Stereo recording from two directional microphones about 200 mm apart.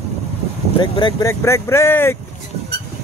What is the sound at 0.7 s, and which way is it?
Speech, 25° left (ahead or behind).